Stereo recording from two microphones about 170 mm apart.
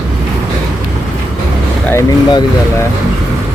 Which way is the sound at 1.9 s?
25° left (ahead or behind).